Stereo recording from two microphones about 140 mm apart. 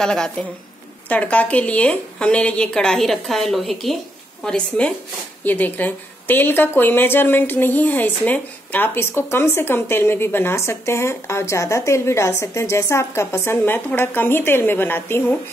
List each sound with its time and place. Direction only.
0.0 s a woman's voice: 5° left (ahead or behind)